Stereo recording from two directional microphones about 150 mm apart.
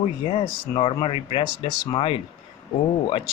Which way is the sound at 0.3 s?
35° left (ahead or behind).